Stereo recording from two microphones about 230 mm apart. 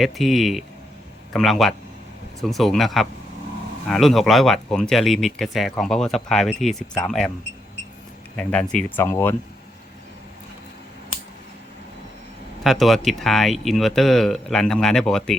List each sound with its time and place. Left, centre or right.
0.0 s speech: centre
8.4 s speech: centre
12.6 s speech: centre